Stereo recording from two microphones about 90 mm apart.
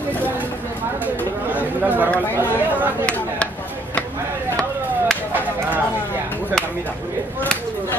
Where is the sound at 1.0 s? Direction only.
20° right (ahead or behind).